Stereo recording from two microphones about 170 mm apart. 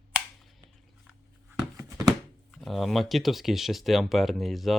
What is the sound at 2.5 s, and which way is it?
Speech, centre (ahead or behind).